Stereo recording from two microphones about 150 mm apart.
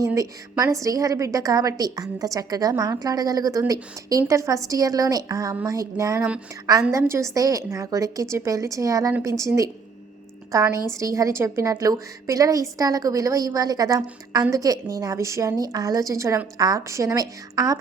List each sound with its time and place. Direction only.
0.0 s a woman's voice: 20° right (ahead or behind)
10.5 s a woman's voice: 20° right (ahead or behind)